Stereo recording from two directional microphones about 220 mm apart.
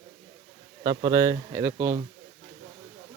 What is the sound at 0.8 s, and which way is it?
A man's voice, 15° right (ahead or behind).